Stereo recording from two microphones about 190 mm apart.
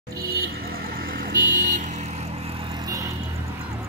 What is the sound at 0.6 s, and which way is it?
Vehicle, 50° right (ahead or behind).